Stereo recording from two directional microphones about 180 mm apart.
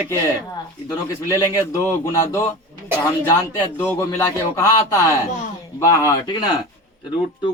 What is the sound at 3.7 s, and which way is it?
Speech, 10° left (ahead or behind).